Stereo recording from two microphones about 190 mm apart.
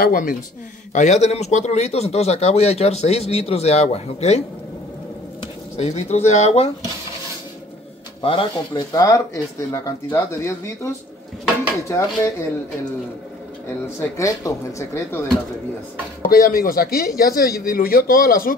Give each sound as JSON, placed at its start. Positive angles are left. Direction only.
{"t": 0.0, "sound": "speech", "side_deg": 45}
{"t": 5.8, "sound": "speech", "side_deg": 35}
{"t": 8.2, "sound": "speech", "side_deg": 30}
{"t": 13.9, "sound": "speech", "side_deg": 15}
{"t": 16.2, "sound": "speech", "side_deg": 45}